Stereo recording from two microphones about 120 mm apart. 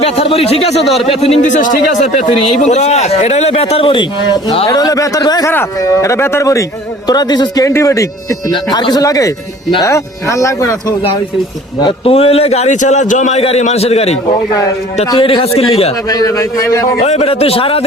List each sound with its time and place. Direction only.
0.0 s a man's voice: 55° left (ahead or behind)
4.7 s speech: 30° left (ahead or behind)
11.8 s a man's voice: 50° left (ahead or behind); by 13.4 s 85° left
13.4 s a man's voice: 65° left (ahead or behind)
15.1 s a man's voice: 45° left (ahead or behind)
16.0 s speech: 30° left (ahead or behind)
17.1 s a man's voice: 60° left (ahead or behind)